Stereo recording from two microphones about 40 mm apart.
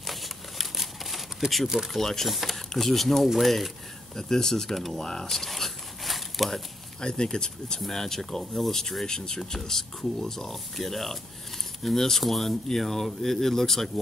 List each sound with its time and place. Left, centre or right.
0.0 s a sound: centre
2.0 s speech: centre
2.2 s speech: centre
4.2 s speech: centre
5.3 s a sound: centre
7.0 s speech: left